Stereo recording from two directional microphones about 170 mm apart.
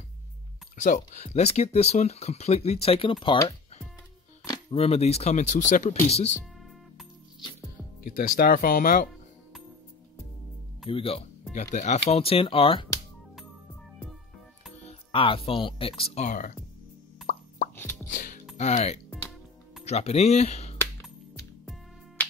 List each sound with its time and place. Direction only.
0.7 s speech: 45° left (ahead or behind)
8.0 s speech: 60° left (ahead or behind)
10.9 s speech: 35° left (ahead or behind)
14.8 s speech: 35° left (ahead or behind)
16.0 s speech: 45° left (ahead or behind)
18.0 s music: 50° left (ahead or behind)
18.6 s speech: 40° left (ahead or behind)